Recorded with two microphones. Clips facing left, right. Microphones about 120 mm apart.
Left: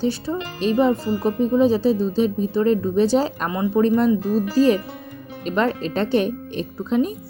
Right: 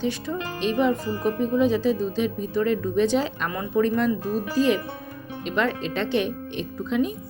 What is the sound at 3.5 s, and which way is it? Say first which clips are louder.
Speech: left 4 dB; 20° left (ahead or behind).